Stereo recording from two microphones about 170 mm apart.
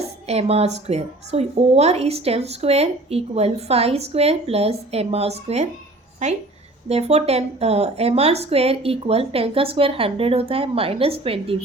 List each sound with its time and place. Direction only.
0.0 s a woman's voice: 40° right (ahead or behind)
6.8 s a woman's voice: 40° right (ahead or behind)